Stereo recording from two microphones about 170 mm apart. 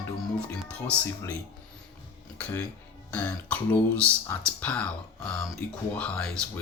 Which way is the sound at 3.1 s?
10° left (ahead or behind).